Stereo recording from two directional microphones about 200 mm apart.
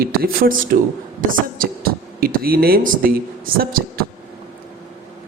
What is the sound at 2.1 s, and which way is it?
Speech, 50° right (ahead or behind).